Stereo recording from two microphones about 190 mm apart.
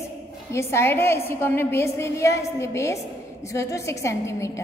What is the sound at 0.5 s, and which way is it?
A woman's voice, 15° left (ahead or behind).